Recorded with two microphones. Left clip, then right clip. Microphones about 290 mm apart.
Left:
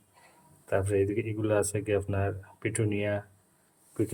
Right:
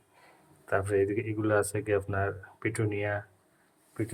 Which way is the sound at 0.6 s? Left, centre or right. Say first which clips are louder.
Even; centre.